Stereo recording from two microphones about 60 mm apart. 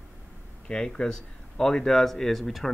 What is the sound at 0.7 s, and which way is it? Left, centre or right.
Speech, centre.